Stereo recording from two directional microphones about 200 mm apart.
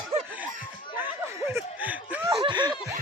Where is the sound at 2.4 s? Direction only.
20° right (ahead or behind).